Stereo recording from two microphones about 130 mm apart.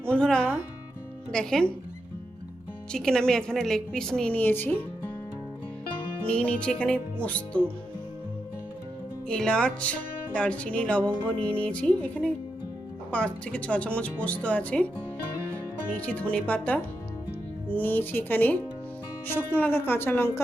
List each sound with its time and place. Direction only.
0.0 s a woman's voice: 10° left (ahead or behind)
2.9 s a woman's voice: 5° left (ahead or behind)
6.2 s speech: 10° left (ahead or behind)
9.3 s speech: 5° left (ahead or behind)
16.0 s speech: 10° left (ahead or behind)